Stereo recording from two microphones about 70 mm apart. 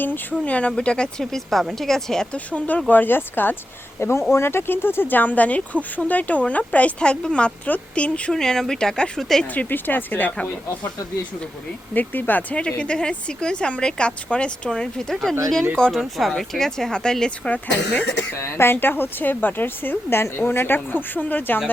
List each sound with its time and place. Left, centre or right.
0.0 s speech: left; by 2.2 s centre
2.3 s speech: centre
4.0 s speech: left; by 9.5 s centre
9.6 s speech: left
11.9 s speech: left; by 17.5 s centre
18.3 s speech: left